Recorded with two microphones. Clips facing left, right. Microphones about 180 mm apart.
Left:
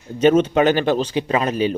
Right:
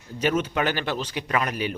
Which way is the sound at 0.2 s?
25° left (ahead or behind).